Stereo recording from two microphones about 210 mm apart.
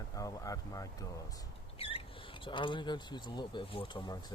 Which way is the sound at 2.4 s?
25° left (ahead or behind).